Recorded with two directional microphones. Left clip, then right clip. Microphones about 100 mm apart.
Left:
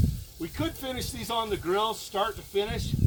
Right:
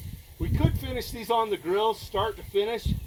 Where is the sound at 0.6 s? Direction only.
40° left (ahead or behind).